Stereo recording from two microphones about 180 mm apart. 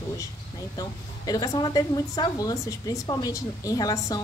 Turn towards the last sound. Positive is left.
turn(degrees=20)  # may be behind; listen again after turning